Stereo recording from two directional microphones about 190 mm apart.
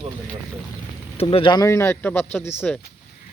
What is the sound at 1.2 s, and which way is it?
Speech, 30° left (ahead or behind).